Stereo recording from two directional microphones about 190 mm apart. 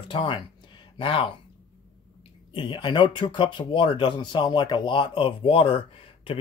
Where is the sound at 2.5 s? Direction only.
25° left (ahead or behind).